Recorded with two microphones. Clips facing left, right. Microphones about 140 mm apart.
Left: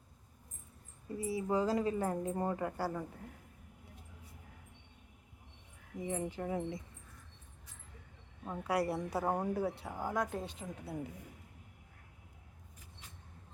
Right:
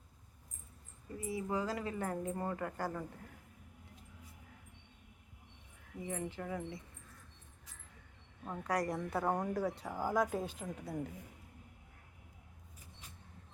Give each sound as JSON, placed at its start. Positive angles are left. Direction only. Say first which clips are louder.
{"t": 1.2, "sound": "a woman's voice", "louder": "left 4 dB", "side_deg": 25}
{"t": 6.0, "sound": "a woman's voice", "louder": "left 3 dB", "side_deg": 20}
{"t": 8.4, "sound": "speech", "louder": "left 2 dB", "side_deg": 10}